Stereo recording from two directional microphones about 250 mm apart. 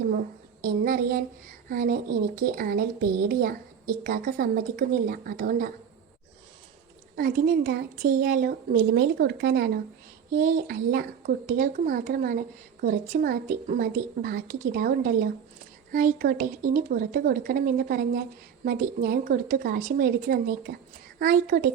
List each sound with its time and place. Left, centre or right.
0.6 s a woman's voice: right
7.2 s a woman's voice: right